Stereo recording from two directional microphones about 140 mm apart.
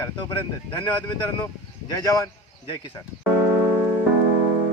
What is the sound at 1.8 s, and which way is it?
Speech, 25° left (ahead or behind).